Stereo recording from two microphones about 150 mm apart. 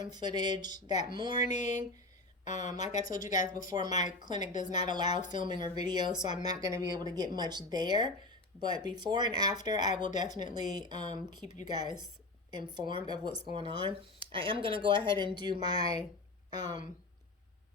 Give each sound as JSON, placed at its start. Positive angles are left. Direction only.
{"t": 0.0, "sound": "speech", "side_deg": -30}
{"t": 2.4, "sound": "speech", "side_deg": 55}
{"t": 3.7, "sound": "speech", "side_deg": -25}
{"t": 5.2, "sound": "speech", "side_deg": 55}
{"t": 5.5, "sound": "speech", "side_deg": -30}
{"t": 9.9, "sound": "speech", "side_deg": 55}
{"t": 10.2, "sound": "speech", "side_deg": -30}